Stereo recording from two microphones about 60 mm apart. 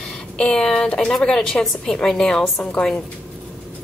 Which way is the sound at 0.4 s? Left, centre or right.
Centre.